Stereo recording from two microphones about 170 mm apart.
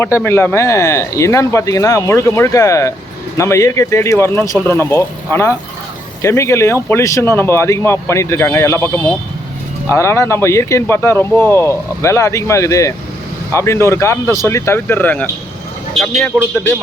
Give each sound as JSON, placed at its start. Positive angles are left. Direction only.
{"t": 0.0, "sound": "speech", "side_deg": 15}